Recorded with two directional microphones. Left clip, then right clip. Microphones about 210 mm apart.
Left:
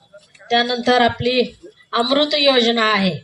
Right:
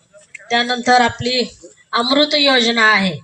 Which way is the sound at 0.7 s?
40° left (ahead or behind).